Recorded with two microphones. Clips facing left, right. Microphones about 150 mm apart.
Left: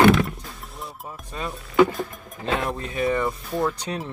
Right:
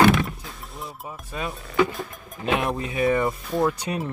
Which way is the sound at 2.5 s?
20° right (ahead or behind).